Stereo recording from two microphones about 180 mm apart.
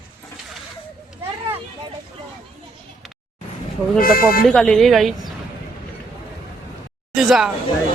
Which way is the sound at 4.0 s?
55° left (ahead or behind).